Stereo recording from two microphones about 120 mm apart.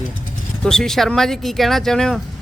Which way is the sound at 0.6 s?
5° left (ahead or behind).